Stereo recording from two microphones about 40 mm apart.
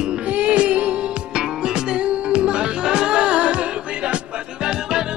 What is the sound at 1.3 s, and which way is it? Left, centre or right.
Music, centre.